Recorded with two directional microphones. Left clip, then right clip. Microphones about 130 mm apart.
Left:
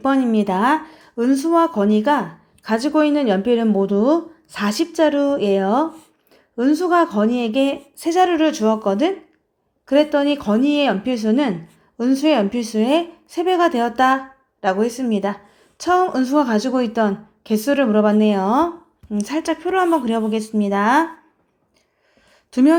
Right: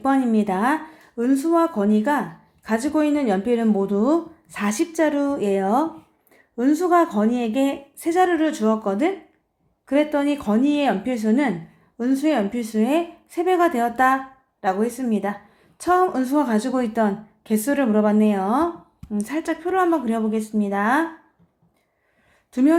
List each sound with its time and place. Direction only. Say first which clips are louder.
0.0 s speech: left 2 dB; 15° left (ahead or behind)
4.6 s speech: left 4 dB; 30° left (ahead or behind)
12.5 s speech: left 3 dB; 20° left (ahead or behind)
22.5 s speech: left 3 dB; 25° left (ahead or behind)